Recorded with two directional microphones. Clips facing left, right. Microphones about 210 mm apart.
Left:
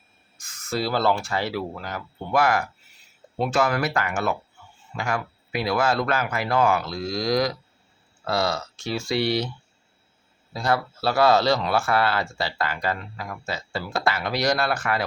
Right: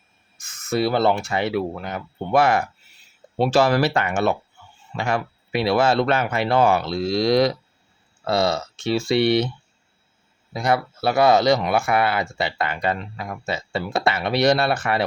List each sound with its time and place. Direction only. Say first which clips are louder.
0.3 s speech: right 5 dB; 20° right (ahead or behind)
10.5 s speech: right 3 dB; 20° right (ahead or behind)